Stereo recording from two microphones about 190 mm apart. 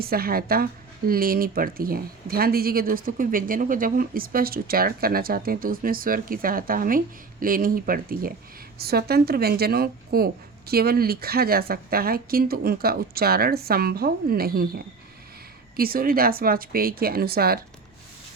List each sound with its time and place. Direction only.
0.0 s a woman's voice: 50° right (ahead or behind)